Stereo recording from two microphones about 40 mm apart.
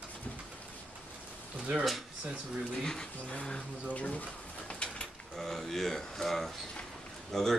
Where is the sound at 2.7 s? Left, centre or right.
Centre.